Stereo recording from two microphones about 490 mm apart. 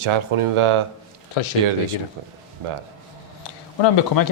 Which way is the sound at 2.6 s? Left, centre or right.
Right.